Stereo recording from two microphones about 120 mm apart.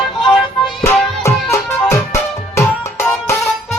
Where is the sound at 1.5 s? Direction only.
25° left (ahead or behind).